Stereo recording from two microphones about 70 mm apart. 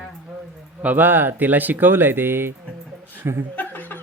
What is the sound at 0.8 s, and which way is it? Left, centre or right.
Speech, right.